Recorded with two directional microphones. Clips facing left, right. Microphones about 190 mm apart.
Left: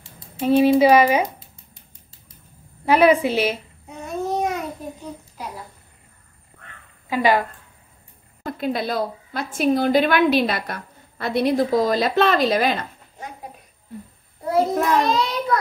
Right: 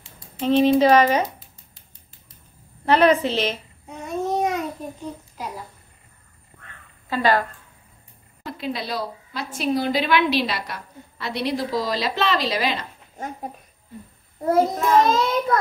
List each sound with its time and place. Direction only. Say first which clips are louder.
0.4 s speech: left 2 dB; 10° left (ahead or behind)
2.8 s babbling: left 2 dB; 10° left (ahead or behind)
7.1 s speech: left 2 dB; 15° left (ahead or behind)
8.5 s a woman's voice: left 4 dB; 50° left (ahead or behind)
15.0 s a child's voice: right 1 dB; 45° right (ahead or behind)